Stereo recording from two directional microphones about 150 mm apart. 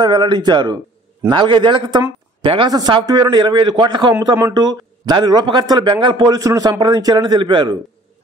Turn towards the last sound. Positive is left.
turn(degrees=-30)  # may be behind; listen again after turning